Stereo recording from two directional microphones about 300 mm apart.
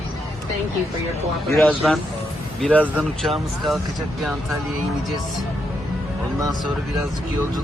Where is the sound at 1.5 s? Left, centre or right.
Centre.